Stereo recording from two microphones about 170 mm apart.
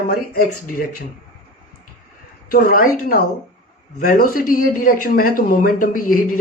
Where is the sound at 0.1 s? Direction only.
60° left (ahead or behind).